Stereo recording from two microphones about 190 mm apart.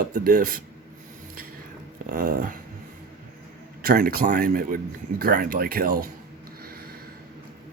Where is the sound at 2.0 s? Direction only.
50° right (ahead or behind).